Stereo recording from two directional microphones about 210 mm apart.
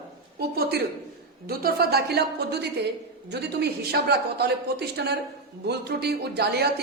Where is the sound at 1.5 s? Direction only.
45° right (ahead or behind).